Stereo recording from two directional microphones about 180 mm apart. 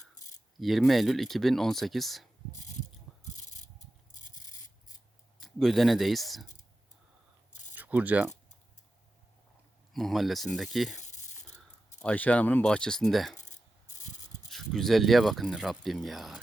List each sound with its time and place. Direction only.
0.6 s speech: centre (ahead or behind)
3.3 s a sound: 40° left (ahead or behind)
4.1 s rub: 45° left (ahead or behind)
5.4 s speech: centre (ahead or behind)
7.8 s speech: 10° right (ahead or behind)
9.9 s speech: centre (ahead or behind)
12.0 s speech: 10° left (ahead or behind)
13.4 s rub: 40° left (ahead or behind)
14.5 s speech: centre (ahead or behind)